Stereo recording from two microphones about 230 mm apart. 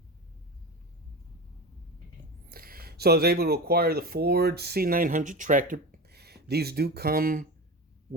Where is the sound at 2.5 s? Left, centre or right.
Right.